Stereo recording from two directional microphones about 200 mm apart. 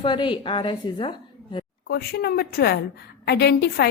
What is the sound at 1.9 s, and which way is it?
A woman's voice, 50° left (ahead or behind).